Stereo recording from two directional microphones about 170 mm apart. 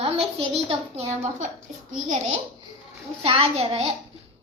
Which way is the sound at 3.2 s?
35° right (ahead or behind).